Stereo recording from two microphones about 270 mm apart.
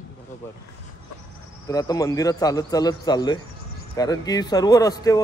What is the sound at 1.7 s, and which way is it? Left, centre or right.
Speech, centre.